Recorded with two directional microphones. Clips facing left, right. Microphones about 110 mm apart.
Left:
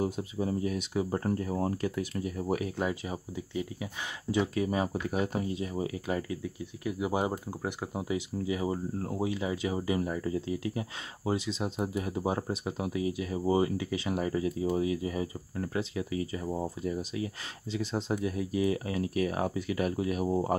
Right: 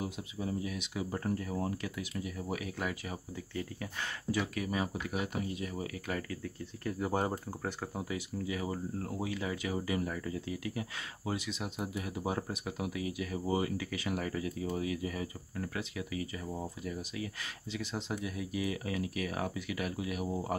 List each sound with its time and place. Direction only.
0.0 s speech: 40° left (ahead or behind)
2.8 s speech: 25° left (ahead or behind)